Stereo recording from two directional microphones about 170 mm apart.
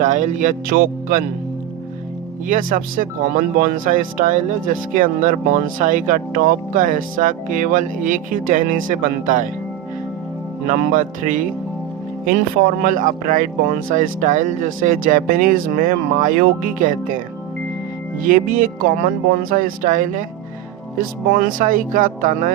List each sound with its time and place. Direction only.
0.0 s speech: 45° right (ahead or behind)
2.5 s speech: 50° right (ahead or behind)
10.7 s speech: 50° right (ahead or behind)
12.8 s speech: 55° right (ahead or behind)